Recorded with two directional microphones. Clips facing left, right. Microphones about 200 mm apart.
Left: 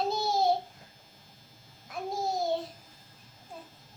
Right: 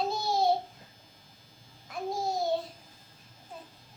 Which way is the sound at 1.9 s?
Centre (ahead or behind).